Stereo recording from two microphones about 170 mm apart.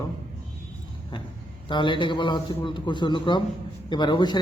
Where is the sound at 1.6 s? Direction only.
30° left (ahead or behind).